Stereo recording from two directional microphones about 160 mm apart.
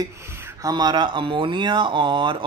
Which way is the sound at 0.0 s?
20° right (ahead or behind).